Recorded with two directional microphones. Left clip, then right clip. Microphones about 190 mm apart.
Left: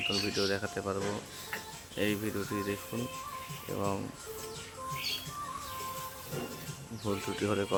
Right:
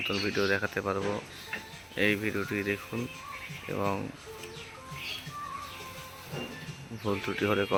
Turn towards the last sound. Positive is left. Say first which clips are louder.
# right 4 dB
turn(degrees=-10)  # may be behind; listen again after turning